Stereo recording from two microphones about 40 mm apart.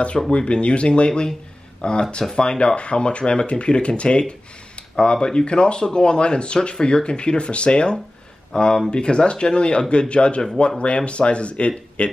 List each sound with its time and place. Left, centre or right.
0.3 s speech: left